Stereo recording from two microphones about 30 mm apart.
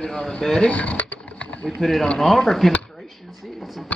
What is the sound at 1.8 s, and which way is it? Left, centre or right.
Speech, centre.